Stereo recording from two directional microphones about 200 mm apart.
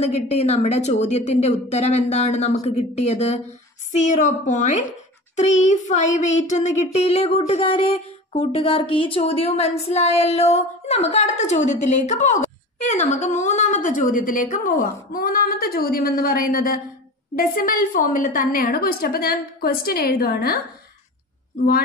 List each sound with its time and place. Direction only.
0.0 s child singing: 30° left (ahead or behind)
17.4 s a woman's voice: 45° left (ahead or behind)